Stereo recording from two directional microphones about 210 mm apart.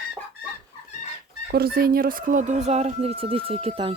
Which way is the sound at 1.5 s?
45° right (ahead or behind).